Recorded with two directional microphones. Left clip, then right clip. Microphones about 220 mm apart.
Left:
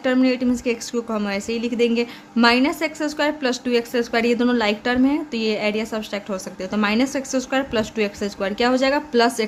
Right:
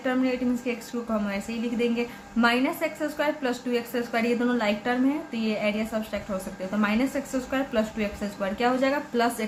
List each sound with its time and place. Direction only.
0.0 s speech: 50° left (ahead or behind)